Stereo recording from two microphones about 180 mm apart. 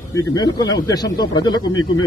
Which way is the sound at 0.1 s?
20° left (ahead or behind).